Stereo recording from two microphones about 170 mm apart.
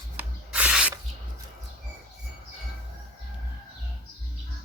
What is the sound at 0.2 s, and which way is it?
Spray, 10° right (ahead or behind).